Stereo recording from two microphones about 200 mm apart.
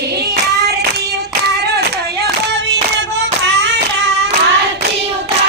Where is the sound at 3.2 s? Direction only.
60° right (ahead or behind).